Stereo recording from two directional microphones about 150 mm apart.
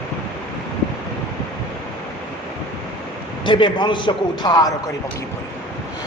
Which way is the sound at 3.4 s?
35° left (ahead or behind).